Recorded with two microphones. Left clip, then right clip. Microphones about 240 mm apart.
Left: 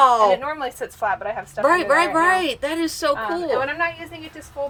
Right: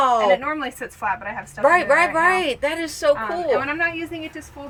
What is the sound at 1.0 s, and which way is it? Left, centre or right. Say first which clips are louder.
Speech: left 2 dB; left.